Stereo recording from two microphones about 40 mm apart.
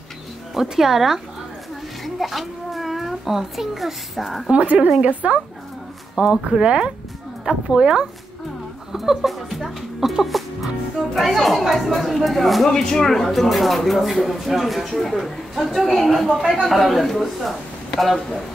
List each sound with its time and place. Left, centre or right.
0.6 s a child's voice: centre
4.5 s a woman's voice: right
6.3 s a woman's voice: centre
8.9 s speech: centre
9.3 s music: centre
11.1 s chatter: centre
11.6 s a man's voice: centre
12.6 s a man's voice: centre